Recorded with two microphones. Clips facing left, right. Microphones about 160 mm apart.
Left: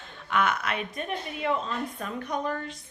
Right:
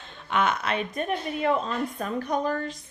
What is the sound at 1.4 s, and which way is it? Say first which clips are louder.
A woman's voice: right 3 dB; 40° right (ahead or behind).